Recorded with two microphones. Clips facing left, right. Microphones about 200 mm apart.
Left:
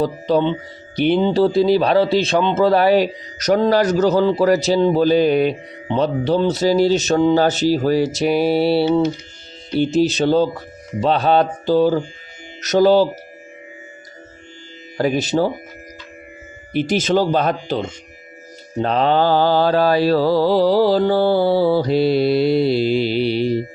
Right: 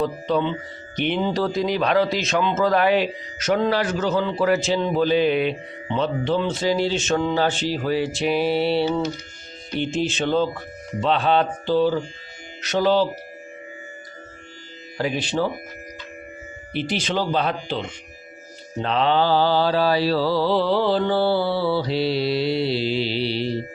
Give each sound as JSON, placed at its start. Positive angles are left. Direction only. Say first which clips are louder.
{"t": 0.0, "sound": "speech", "louder": "left 5 dB", "side_deg": 35}
{"t": 14.9, "sound": "speech", "louder": "left 6 dB", "side_deg": 45}
{"t": 16.7, "sound": "mantra", "louder": "left 7 dB", "side_deg": 45}